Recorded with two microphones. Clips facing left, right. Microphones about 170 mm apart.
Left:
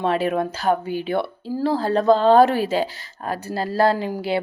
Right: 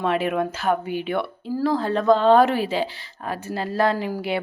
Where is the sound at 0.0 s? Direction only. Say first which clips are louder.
Left 1 dB; 35° left (ahead or behind).